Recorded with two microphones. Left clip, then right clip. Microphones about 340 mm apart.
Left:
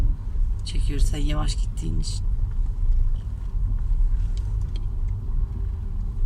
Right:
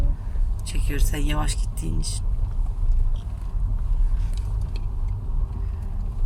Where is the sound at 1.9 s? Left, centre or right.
Left.